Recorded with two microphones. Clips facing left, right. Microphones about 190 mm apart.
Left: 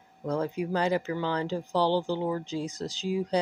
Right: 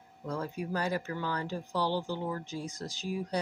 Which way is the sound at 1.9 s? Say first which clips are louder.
Left 6 dB; 25° left (ahead or behind).